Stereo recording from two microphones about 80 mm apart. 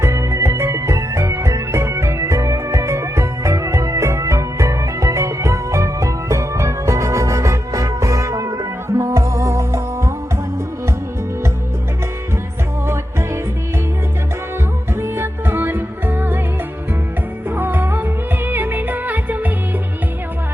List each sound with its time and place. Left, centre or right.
0.0 s music: right
15.0 s music: right
17.5 s music: right